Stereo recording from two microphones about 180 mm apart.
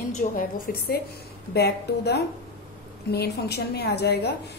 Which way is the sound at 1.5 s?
65° left (ahead or behind).